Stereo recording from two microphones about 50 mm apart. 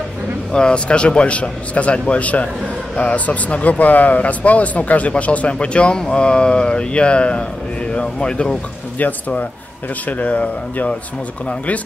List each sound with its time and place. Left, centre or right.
0.5 s a man's voice: centre
9.0 s a man's voice: left